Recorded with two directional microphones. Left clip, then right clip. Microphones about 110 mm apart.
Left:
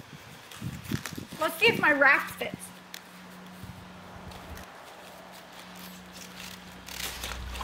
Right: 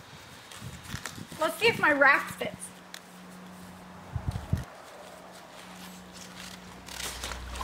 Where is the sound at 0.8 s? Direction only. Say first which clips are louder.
Left 3 dB; 5° right (ahead or behind).